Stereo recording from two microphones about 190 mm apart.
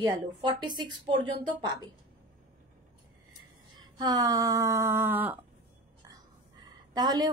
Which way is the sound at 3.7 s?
20° right (ahead or behind).